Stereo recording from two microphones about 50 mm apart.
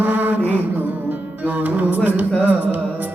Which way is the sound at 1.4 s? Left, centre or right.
Right.